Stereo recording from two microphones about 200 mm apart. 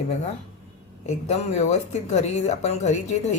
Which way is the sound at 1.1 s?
35° left (ahead or behind).